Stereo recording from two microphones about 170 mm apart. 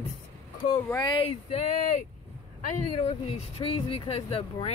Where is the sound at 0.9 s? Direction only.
30° left (ahead or behind).